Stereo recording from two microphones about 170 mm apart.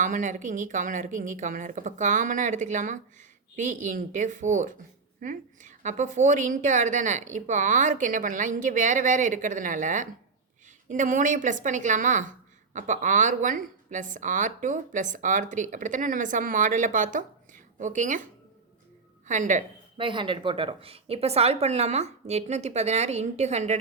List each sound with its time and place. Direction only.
0.0 s a woman's voice: 50° right (ahead or behind)
19.3 s a woman's voice: 45° right (ahead or behind)
20.0 s a woman's voice: 30° right (ahead or behind)